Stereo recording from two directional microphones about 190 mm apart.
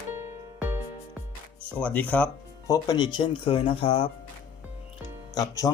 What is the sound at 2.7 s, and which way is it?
Speech, 20° left (ahead or behind).